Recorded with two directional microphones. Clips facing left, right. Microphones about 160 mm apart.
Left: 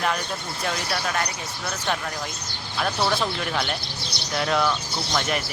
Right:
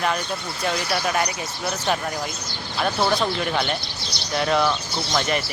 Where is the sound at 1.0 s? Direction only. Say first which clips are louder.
Right 4 dB; 10° right (ahead or behind).